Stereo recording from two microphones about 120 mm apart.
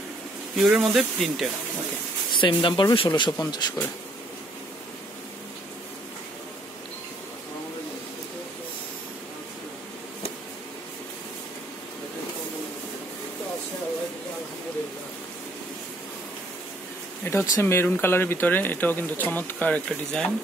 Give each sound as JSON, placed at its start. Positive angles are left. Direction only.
{"t": 0.6, "sound": "speech", "side_deg": -5}
{"t": 2.4, "sound": "speech", "side_deg": 40}
{"t": 17.2, "sound": "speech", "side_deg": 20}